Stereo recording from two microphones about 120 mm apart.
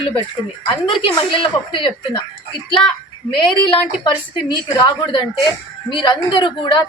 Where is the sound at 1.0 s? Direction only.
45° left (ahead or behind).